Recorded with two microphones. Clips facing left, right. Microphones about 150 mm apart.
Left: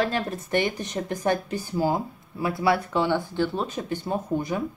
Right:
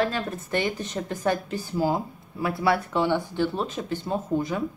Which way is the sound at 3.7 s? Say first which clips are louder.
Even; 15° left (ahead or behind).